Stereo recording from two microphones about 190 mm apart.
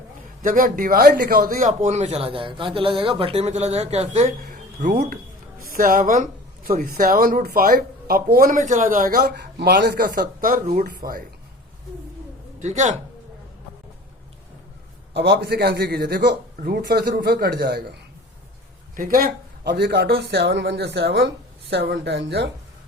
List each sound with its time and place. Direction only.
0.4 s speech: 45° right (ahead or behind)
12.5 s speech: 40° right (ahead or behind)
15.1 s speech: 60° right (ahead or behind)
18.9 s speech: 50° right (ahead or behind); by 22.4 s 65° right (ahead or behind)